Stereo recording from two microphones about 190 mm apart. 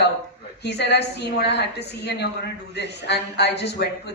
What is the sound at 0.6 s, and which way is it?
A woman's voice, 60° left (ahead or behind).